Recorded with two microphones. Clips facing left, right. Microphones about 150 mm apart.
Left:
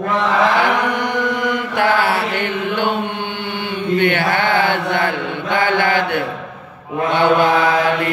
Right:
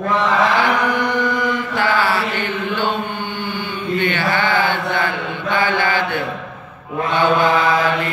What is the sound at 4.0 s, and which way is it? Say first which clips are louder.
Mantra: left 2 dB; 60° left (ahead or behind).